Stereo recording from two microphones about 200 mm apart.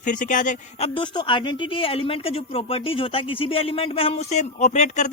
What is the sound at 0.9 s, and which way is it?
Speech, 25° left (ahead or behind).